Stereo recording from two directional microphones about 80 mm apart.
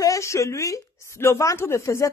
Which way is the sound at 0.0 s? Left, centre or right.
Left.